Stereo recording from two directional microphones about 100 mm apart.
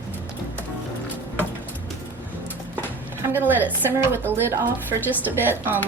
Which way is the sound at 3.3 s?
20° right (ahead or behind).